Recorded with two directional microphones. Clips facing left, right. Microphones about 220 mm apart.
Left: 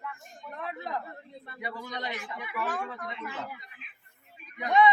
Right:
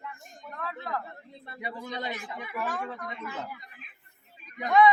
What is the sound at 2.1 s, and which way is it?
Speech, 45° right (ahead or behind).